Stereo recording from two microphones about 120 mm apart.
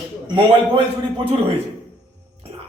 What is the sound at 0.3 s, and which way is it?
Speech, 40° right (ahead or behind).